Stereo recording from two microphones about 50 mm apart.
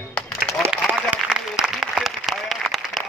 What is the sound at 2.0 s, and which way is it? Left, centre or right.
Applause, centre.